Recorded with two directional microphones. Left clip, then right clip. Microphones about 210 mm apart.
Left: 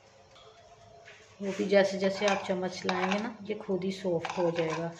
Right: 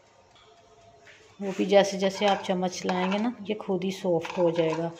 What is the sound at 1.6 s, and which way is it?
Speech, 35° right (ahead or behind).